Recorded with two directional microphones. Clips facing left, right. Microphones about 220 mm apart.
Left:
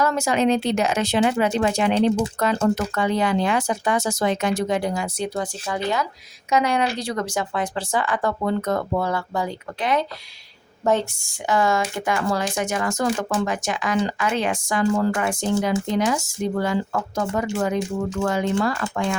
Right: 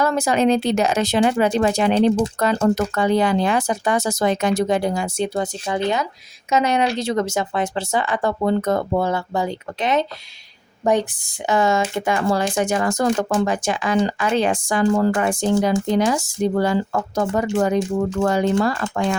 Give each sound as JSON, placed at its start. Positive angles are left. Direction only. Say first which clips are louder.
{"t": 0.0, "sound": "speech", "louder": "right 2 dB", "side_deg": -35}